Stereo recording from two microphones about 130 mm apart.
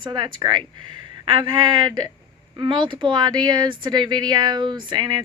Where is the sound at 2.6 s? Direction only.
35° right (ahead or behind).